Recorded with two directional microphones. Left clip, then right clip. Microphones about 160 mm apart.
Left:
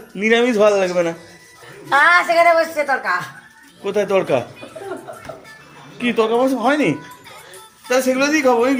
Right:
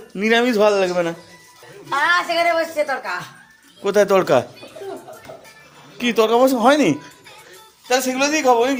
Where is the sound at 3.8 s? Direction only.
45° right (ahead or behind).